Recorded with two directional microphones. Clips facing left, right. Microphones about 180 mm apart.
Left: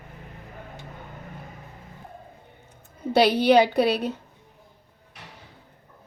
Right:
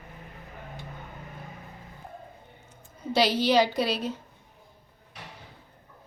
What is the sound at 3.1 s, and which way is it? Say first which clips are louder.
A woman's voice: left 5 dB; 60° left (ahead or behind).